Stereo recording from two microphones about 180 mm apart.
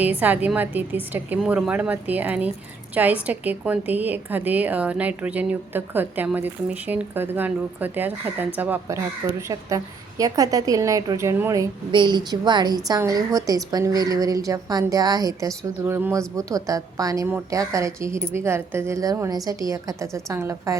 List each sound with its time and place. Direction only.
0.2 s a woman's voice: 10° right (ahead or behind)